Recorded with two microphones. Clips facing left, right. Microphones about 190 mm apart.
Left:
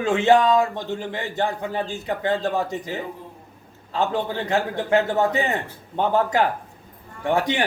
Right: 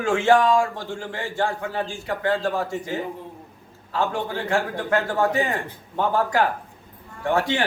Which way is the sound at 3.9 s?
20° left (ahead or behind).